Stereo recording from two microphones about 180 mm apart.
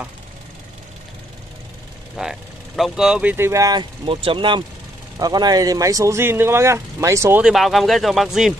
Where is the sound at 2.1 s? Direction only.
Centre (ahead or behind).